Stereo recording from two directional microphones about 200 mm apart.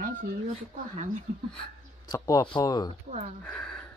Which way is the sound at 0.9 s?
35° right (ahead or behind).